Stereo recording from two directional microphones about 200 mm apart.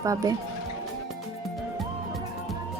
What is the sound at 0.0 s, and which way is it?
Speech, 15° right (ahead or behind).